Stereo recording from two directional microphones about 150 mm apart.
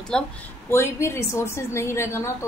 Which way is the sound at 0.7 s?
15° left (ahead or behind).